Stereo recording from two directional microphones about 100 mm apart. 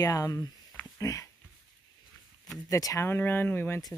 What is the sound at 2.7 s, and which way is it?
Speech, 35° left (ahead or behind).